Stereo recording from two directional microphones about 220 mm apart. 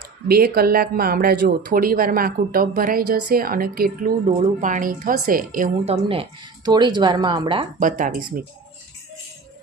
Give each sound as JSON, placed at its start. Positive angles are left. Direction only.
{"t": 0.3, "sound": "a woman's voice", "side_deg": -45}
{"t": 7.8, "sound": "a woman's voice", "side_deg": -35}